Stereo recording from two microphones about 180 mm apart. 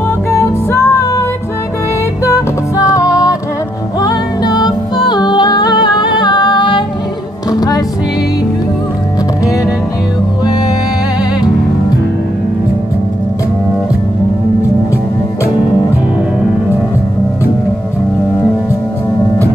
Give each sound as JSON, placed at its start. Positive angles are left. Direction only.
{"t": 0.3, "sound": "music", "side_deg": 15}
{"t": 2.2, "sound": "music", "side_deg": 15}